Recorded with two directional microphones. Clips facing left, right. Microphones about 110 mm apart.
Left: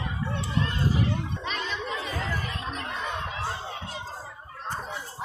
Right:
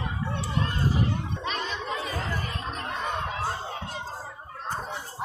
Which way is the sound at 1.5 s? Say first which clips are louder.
Right 1 dB; 40° right (ahead or behind).